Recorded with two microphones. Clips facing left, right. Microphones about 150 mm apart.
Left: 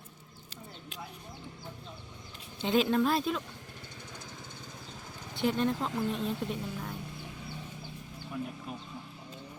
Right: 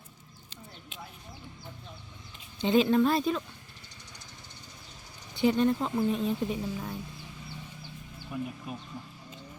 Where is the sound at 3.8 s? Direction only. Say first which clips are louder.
Left 6 dB; 55° left (ahead or behind).